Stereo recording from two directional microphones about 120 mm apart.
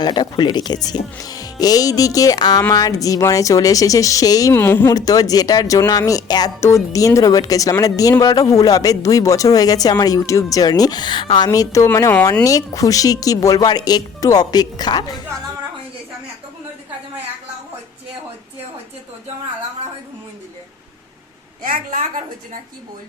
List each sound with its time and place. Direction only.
0.0 s speech: 35° left (ahead or behind)
4.5 s speech: 15° left (ahead or behind)
4.9 s speech: 30° left (ahead or behind)